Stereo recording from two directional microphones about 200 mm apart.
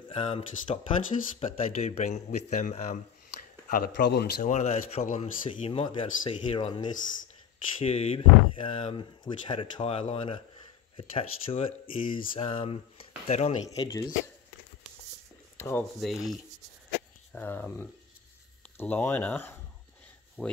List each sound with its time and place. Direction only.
0.1 s speech: 30° left (ahead or behind)
3.7 s speech: 55° left (ahead or behind)
4.4 s speech: 35° left (ahead or behind)
13.7 s speech: 20° left (ahead or behind)
15.5 s a sound: 15° left (ahead or behind)
16.0 s rub: centre (ahead or behind)
17.3 s speech: 10° left (ahead or behind)
20.4 s rub: 5° left (ahead or behind)